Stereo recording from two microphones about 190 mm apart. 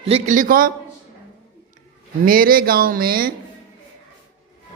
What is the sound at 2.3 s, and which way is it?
Speech, 50° right (ahead or behind).